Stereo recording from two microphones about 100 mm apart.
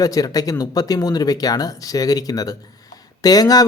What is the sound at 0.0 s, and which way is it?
Speech, 40° left (ahead or behind).